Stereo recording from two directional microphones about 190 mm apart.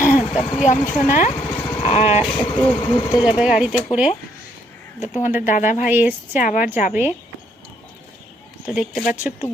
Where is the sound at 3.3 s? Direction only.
5° right (ahead or behind).